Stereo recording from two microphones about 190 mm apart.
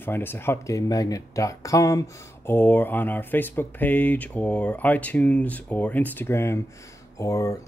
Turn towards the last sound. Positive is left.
turn(degrees=15)  # may be behind; listen again after turning